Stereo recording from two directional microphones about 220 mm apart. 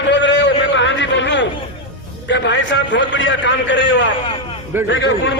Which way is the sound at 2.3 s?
55° left (ahead or behind).